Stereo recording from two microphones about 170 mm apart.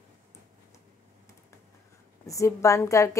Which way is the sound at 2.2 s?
20° left (ahead or behind).